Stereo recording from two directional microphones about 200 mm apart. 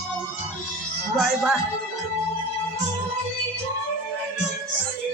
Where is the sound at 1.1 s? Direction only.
Centre (ahead or behind).